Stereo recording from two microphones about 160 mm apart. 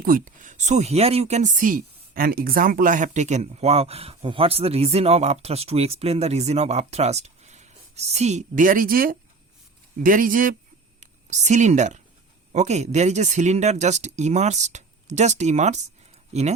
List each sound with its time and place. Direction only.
0.0 s a woman's voice: 60° right (ahead or behind)